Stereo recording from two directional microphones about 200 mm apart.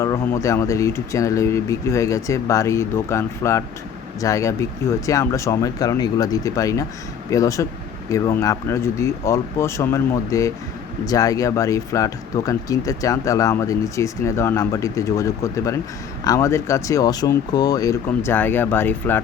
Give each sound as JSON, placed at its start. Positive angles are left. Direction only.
{"t": 0.0, "sound": "speech", "side_deg": 15}